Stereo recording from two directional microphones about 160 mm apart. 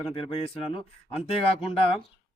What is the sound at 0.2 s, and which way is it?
Speech, 35° left (ahead or behind).